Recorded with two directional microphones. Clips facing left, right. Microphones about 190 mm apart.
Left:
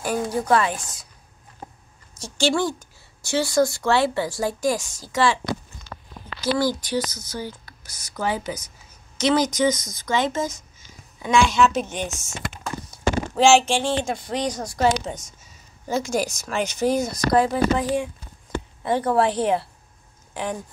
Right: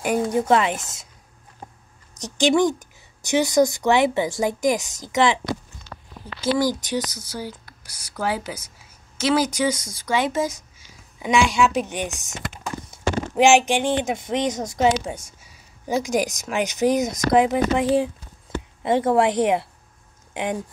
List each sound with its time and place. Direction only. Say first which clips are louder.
0.0 s a woman's voice: right 3 dB; 20° right (ahead or behind)
2.1 s speech: right 4 dB; 15° right (ahead or behind)
6.6 s a woman's voice: even; 15° right (ahead or behind)